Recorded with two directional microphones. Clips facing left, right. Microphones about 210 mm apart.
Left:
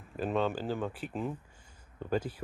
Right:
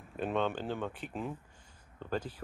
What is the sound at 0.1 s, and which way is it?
Speech, centre (ahead or behind).